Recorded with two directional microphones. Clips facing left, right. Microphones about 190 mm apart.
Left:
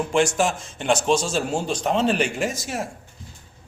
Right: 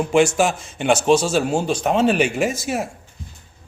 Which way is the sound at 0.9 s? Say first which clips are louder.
Right 4 dB; 5° right (ahead or behind).